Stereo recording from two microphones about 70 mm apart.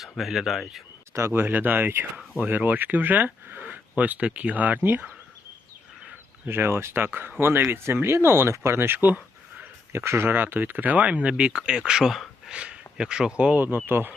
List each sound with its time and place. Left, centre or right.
0.0 s speech: centre
1.3 s speech: right
6.4 s speech: right
9.9 s speech: right; by 13.6 s centre
13.6 s speech: right